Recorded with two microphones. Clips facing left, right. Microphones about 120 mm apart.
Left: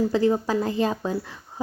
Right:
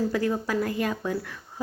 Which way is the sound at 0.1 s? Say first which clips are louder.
Left 5 dB; 25° left (ahead or behind).